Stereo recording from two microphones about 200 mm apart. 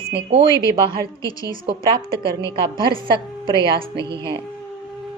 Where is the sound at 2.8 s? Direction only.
25° right (ahead or behind).